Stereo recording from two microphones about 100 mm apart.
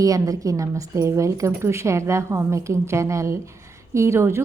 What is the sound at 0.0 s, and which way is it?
A woman's voice, 35° right (ahead or behind).